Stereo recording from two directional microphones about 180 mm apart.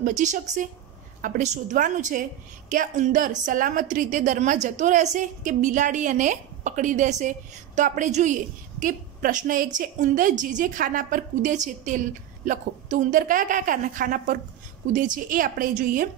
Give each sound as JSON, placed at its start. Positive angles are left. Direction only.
{"t": 0.0, "sound": "a woman's voice", "side_deg": -45}